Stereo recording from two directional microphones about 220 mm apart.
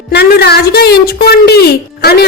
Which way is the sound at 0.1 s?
50° left (ahead or behind).